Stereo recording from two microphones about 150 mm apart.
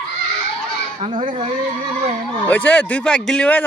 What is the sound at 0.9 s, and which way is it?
Speech, 35° right (ahead or behind).